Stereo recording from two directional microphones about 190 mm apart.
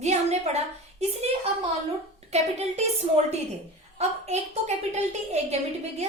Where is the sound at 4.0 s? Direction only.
35° right (ahead or behind).